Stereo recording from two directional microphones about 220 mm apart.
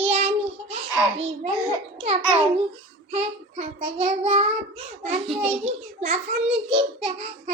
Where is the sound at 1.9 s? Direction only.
25° right (ahead or behind).